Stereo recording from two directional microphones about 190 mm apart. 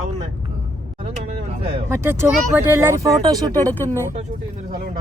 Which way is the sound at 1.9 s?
15° right (ahead or behind).